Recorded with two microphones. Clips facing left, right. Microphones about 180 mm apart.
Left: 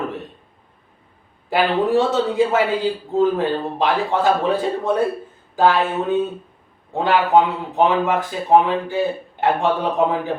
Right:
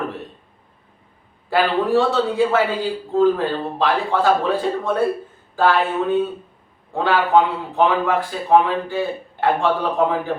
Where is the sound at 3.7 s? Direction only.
20° left (ahead or behind).